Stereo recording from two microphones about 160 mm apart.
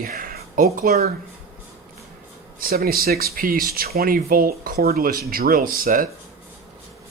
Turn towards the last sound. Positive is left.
turn(degrees=-65)  # may be behind; listen again after turning